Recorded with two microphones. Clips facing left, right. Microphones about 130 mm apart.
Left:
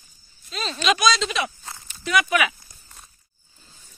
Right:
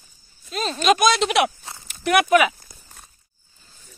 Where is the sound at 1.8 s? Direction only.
60° right (ahead or behind).